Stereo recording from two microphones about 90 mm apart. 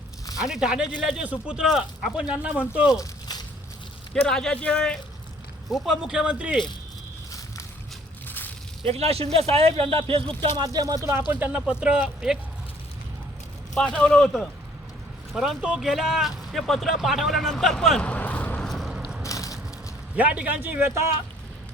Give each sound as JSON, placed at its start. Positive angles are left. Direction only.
{"t": 0.4, "sound": "speech", "side_deg": -5}
{"t": 3.0, "sound": "a sound", "side_deg": 50}
{"t": 4.1, "sound": "speech", "side_deg": 5}
{"t": 5.7, "sound": "speech", "side_deg": -5}
{"t": 8.8, "sound": "speech", "side_deg": -90}
{"t": 10.6, "sound": "speech", "side_deg": -45}
{"t": 11.3, "sound": "speech", "side_deg": -20}
{"t": 11.6, "sound": "speech", "side_deg": -10}
{"t": 13.7, "sound": "speech", "side_deg": 10}
{"t": 15.3, "sound": "speech", "side_deg": -5}
{"t": 18.9, "sound": "a sound", "side_deg": -10}
{"t": 19.2, "sound": "a sound", "side_deg": 40}
{"t": 20.1, "sound": "speech", "side_deg": -15}